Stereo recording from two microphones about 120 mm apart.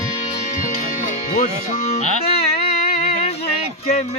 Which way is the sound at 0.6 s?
90° left.